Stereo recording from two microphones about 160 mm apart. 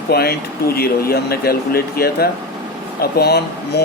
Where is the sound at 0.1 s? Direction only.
80° left.